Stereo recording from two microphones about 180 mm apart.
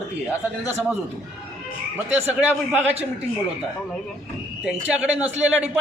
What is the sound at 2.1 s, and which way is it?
Speech, 10° right (ahead or behind).